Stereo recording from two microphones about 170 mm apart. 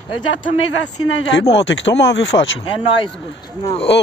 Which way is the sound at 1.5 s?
90° left.